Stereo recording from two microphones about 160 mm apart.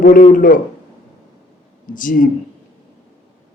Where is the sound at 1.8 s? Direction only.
55° left (ahead or behind).